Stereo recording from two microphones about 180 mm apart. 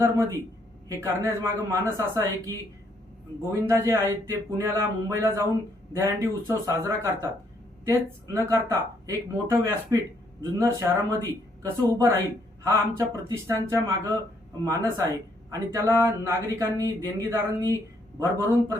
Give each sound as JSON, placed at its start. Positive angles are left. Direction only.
{"t": 0.0, "sound": "speech", "side_deg": -15}
{"t": 3.7, "sound": "speech", "side_deg": -15}